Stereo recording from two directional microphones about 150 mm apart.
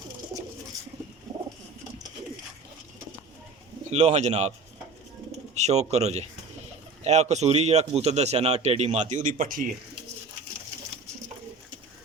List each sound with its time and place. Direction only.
3.8 s a man's voice: 45° right (ahead or behind)
5.5 s a man's voice: 45° right (ahead or behind)